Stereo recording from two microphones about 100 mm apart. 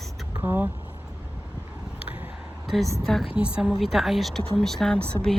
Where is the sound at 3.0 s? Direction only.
Centre (ahead or behind).